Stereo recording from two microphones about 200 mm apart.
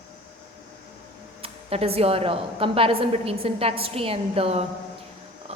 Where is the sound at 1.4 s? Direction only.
30° right (ahead or behind).